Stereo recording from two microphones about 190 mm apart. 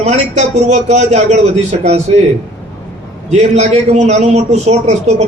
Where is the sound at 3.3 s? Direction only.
35° right (ahead or behind).